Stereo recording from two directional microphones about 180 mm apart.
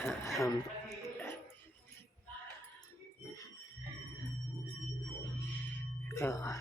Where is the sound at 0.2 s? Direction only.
15° left (ahead or behind).